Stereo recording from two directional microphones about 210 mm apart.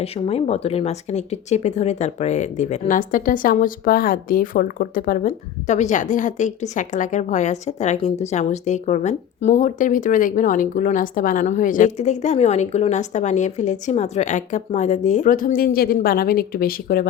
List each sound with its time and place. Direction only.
0.0 s speech: 30° left (ahead or behind); by 17.1 s 45° left (ahead or behind)